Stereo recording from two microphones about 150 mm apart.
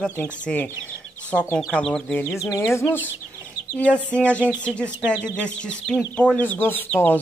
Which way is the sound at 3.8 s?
10° left (ahead or behind).